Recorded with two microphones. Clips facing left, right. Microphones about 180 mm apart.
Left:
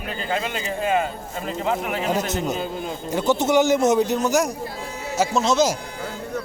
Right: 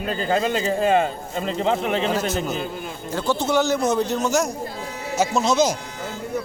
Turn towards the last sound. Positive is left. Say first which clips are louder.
# even
turn(degrees=0)  # may be behind; listen again after turning